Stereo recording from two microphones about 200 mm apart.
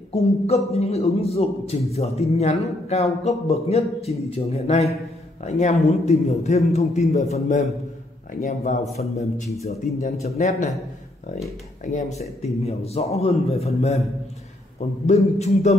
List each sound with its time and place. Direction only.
0.1 s a man's voice: 30° left (ahead or behind)
8.4 s speech: 45° left (ahead or behind)
9.1 s a man's voice: 30° left (ahead or behind)
11.8 s a man's voice: 35° left (ahead or behind)
15.0 s a man's voice: 35° left (ahead or behind)